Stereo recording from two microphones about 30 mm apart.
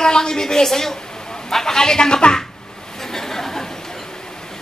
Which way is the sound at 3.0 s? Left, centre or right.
Centre.